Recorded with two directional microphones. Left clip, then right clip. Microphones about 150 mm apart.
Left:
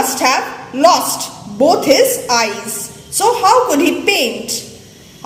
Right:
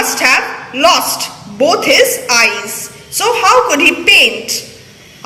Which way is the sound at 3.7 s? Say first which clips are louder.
Right 6 dB; 25° left (ahead or behind).